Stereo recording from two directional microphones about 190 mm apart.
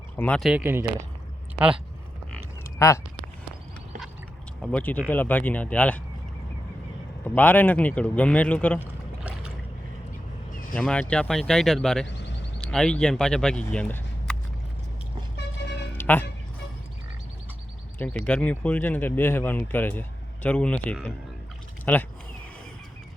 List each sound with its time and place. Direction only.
0.2 s speech: 5° left (ahead or behind)
2.7 s speech: 15° left (ahead or behind)
4.6 s speech: 10° left (ahead or behind)
7.3 s speech: 10° left (ahead or behind)
10.8 s speech: 5° left (ahead or behind)
12.0 s speech: 65° left (ahead or behind)
12.5 s speech: 5° left (ahead or behind)
13.7 s a sound: 5° left (ahead or behind)
16.0 s a sound: 10° left (ahead or behind)
18.0 s speech: 5° left (ahead or behind)